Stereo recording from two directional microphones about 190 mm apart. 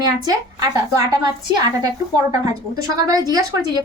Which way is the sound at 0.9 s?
20° right (ahead or behind).